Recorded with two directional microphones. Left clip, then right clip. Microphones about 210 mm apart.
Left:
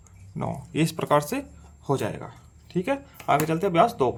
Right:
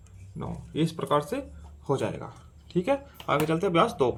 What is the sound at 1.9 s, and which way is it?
Speech, 15° left (ahead or behind).